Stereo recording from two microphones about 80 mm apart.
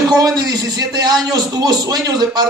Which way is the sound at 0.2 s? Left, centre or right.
Right.